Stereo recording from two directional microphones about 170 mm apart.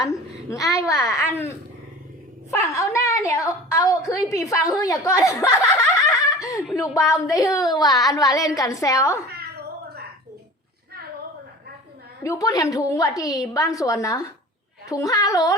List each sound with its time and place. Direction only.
0.0 s a child's voice: 20° left (ahead or behind)
2.5 s a woman's voice: 20° left (ahead or behind)
12.2 s a woman's voice: 20° left (ahead or behind)